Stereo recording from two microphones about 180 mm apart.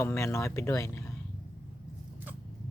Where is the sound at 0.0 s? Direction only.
15° left (ahead or behind).